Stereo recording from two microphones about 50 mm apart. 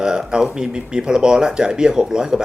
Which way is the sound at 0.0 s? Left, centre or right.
Centre.